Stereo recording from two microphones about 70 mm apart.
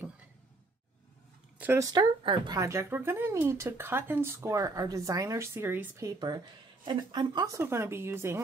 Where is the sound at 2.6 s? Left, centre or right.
Right.